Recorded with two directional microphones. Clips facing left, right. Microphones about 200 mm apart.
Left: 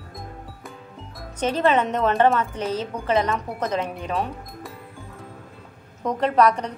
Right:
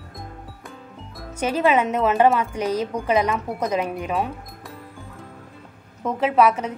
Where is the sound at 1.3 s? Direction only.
10° right (ahead or behind).